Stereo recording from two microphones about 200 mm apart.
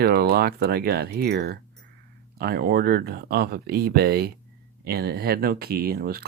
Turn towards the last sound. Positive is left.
turn(degrees=-50)  # may be behind; listen again after turning